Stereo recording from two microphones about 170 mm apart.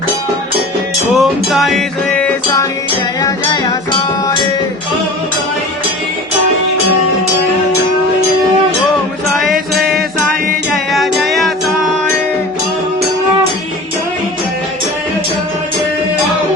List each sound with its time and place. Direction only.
1.1 s music: centre (ahead or behind)
3.2 s music: 20° left (ahead or behind)
9.5 s music: centre (ahead or behind)